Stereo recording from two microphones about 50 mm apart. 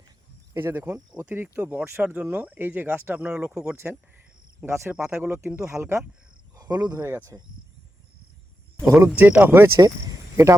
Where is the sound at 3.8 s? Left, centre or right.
Right.